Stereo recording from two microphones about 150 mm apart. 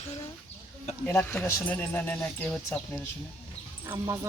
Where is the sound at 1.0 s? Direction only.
10° left (ahead or behind).